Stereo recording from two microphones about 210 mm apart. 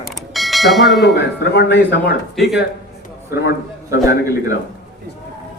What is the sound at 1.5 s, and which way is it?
Speech, 55° left (ahead or behind).